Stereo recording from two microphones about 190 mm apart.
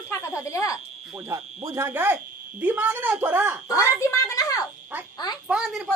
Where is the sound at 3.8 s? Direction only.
15° left (ahead or behind).